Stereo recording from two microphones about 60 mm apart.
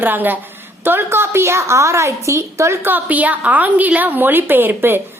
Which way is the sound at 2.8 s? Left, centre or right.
Right.